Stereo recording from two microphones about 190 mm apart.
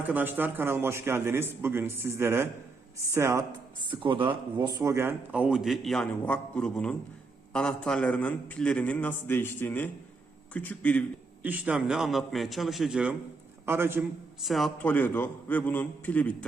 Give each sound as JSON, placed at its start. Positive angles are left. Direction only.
{"t": 0.1, "sound": "a man's voice", "side_deg": -10}
{"t": 4.0, "sound": "a man's voice", "side_deg": -25}
{"t": 11.4, "sound": "a man's voice", "side_deg": -10}
{"t": 14.4, "sound": "a man's voice", "side_deg": 0}